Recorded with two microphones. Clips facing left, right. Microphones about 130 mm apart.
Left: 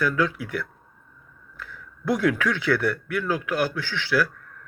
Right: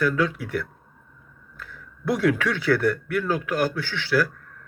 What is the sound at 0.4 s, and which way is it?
Speech, 45° right (ahead or behind).